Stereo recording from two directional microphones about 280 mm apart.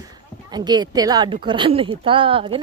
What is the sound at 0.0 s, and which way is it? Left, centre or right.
Speech, centre.